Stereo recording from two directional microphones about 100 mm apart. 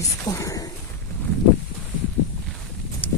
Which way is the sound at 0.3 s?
30° left (ahead or behind).